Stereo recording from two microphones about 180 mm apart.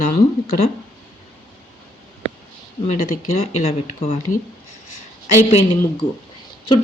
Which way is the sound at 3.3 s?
35° left (ahead or behind).